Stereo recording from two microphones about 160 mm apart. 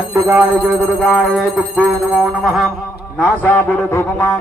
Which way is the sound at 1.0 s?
Centre (ahead or behind).